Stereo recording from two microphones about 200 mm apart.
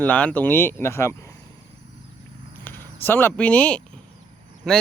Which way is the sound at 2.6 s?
10° left (ahead or behind).